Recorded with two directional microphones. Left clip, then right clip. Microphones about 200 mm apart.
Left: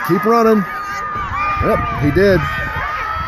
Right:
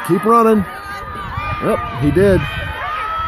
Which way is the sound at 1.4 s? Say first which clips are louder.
Left 2 dB; 15° right (ahead or behind).